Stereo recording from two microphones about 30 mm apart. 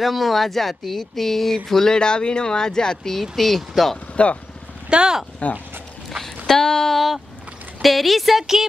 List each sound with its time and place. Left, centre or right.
0.0 s speech: centre
2.0 s speech: left
3.1 s speech: centre
4.8 s speech: right
5.4 s speech: left
6.2 s a sound: centre
6.9 s speech: centre